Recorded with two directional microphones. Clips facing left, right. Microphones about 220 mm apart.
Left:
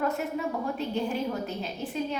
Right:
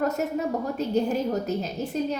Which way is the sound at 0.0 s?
40° right (ahead or behind).